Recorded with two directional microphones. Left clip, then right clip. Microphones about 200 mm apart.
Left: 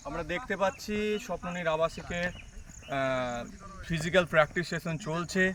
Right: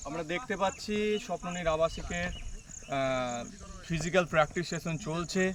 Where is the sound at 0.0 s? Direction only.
10° left (ahead or behind).